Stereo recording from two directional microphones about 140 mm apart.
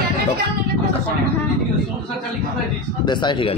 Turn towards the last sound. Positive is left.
turn(degrees=35)  # may be behind; listen again after turning